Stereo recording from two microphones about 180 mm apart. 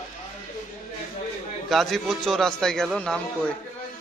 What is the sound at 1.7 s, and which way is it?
Speech, centre (ahead or behind).